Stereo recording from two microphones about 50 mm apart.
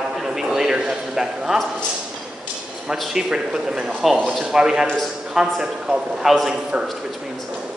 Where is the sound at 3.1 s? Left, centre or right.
Centre.